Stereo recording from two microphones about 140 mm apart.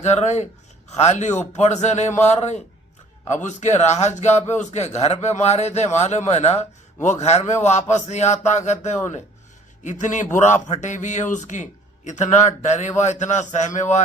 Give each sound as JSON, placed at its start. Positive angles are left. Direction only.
{"t": 0.0, "sound": "a man's voice", "side_deg": 55}